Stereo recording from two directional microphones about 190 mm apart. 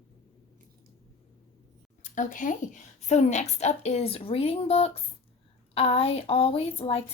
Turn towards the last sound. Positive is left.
turn(degrees=30)  # may be behind; listen again after turning